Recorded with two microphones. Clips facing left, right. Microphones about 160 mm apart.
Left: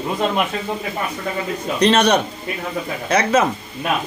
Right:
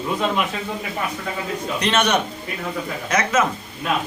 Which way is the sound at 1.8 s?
35° left (ahead or behind).